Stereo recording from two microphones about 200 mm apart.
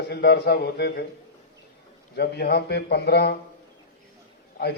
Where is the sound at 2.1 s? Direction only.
55° left (ahead or behind).